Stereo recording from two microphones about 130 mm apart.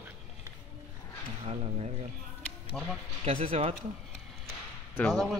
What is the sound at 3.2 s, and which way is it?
Speech, 45° right (ahead or behind).